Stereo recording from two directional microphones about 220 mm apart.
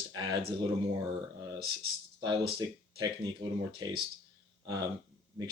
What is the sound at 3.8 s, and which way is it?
Speech, 15° right (ahead or behind).